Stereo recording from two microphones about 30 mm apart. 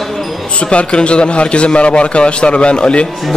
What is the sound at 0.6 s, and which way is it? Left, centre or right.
Speech, left.